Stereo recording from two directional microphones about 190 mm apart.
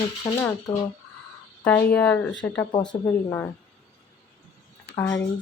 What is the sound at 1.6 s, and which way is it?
Speech, 10° left (ahead or behind).